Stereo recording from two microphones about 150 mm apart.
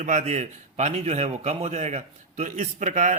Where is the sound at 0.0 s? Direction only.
55° right (ahead or behind).